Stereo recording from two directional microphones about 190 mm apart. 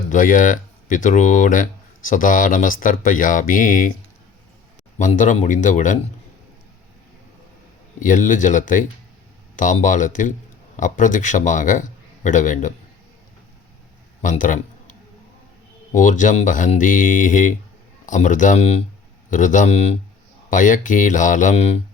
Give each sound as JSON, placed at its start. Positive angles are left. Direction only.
{"t": 0.1, "sound": "speech", "side_deg": 45}
{"t": 4.9, "sound": "a man's voice", "side_deg": 40}
{"t": 7.9, "sound": "a man's voice", "side_deg": 40}
{"t": 14.2, "sound": "a sound", "side_deg": 45}
{"t": 15.9, "sound": "a man's voice", "side_deg": 40}